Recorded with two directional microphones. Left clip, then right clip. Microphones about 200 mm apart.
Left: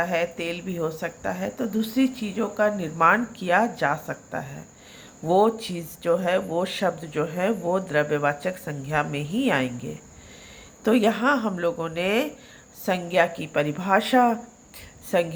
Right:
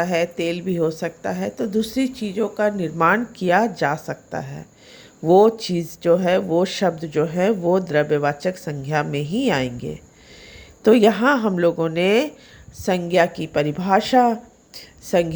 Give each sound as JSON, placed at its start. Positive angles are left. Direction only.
{"t": 0.0, "sound": "a woman's voice", "side_deg": -50}